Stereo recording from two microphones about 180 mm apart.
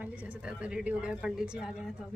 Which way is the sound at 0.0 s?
10° right (ahead or behind).